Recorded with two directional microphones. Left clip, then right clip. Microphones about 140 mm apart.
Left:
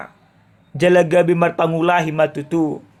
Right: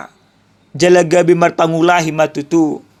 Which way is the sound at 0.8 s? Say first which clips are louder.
Right 3 dB; 30° right (ahead or behind).